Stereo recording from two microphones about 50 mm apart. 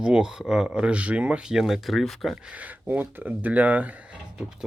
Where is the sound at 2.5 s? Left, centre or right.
Right.